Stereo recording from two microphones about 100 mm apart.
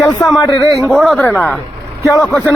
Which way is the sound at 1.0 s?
Centre (ahead or behind).